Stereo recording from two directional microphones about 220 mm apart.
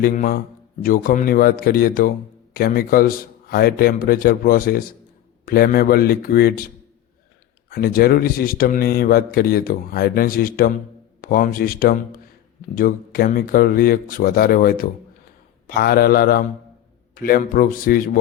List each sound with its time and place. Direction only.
0.0 s speech: 40° left (ahead or behind)
7.7 s speech: 45° left (ahead or behind)